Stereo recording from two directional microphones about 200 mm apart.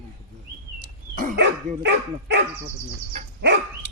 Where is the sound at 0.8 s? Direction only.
40° right (ahead or behind).